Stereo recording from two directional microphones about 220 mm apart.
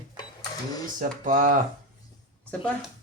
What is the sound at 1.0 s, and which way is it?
Speech, 40° right (ahead or behind).